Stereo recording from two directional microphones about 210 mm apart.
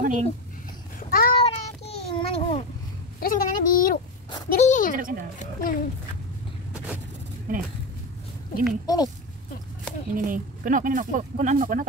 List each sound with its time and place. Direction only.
0.0 s a sound: 40° right (ahead or behind)
0.9 s a sound: 45° left (ahead or behind)
1.3 s child singing: 25° left (ahead or behind)
3.2 s speech: 40° left (ahead or behind)
4.9 s speech: 40° right (ahead or behind)
5.4 s speech: 40° left (ahead or behind)
7.5 s speech: 40° right (ahead or behind)
8.8 s speech: 20° left (ahead or behind)
10.1 s speech: 40° right (ahead or behind)